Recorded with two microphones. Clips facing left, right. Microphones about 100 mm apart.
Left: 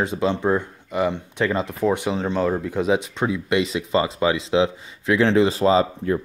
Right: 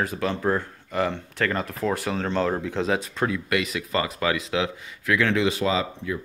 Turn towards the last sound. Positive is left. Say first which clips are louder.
# left 7 dB
turn(degrees=40)  # may be behind; listen again after turning